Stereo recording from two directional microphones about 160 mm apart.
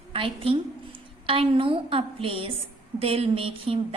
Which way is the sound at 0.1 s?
35° right (ahead or behind).